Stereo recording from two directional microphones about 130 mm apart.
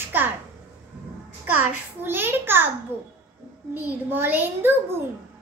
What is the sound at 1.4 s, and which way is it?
Child singing, 15° right (ahead or behind).